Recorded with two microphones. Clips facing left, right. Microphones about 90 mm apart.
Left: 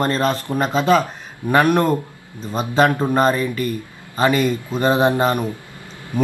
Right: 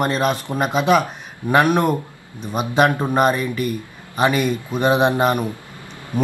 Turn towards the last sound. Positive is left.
turn(degrees=-20)  # may be behind; listen again after turning